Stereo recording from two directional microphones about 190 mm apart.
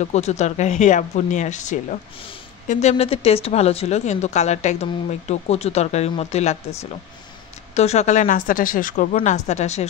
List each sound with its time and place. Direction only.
0.0 s speech: 35° left (ahead or behind)
7.7 s speech: 35° left (ahead or behind)